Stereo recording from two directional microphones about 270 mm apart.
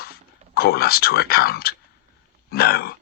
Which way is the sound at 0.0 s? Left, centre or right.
Left.